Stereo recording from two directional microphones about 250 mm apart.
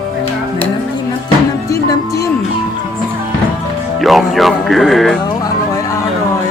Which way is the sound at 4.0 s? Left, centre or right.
Centre.